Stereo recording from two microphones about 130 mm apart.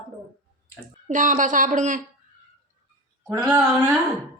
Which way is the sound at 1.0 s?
80° right.